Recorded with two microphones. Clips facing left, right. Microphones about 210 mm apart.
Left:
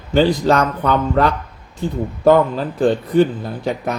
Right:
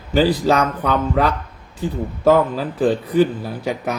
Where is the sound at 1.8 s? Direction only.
5° right (ahead or behind).